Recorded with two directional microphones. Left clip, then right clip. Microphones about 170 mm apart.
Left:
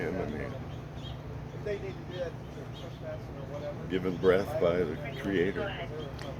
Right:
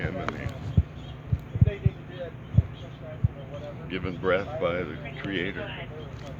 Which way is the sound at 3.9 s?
35° left (ahead or behind).